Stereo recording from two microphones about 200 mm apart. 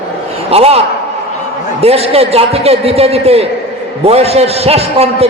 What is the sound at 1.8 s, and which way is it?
A man's voice, 30° right (ahead or behind).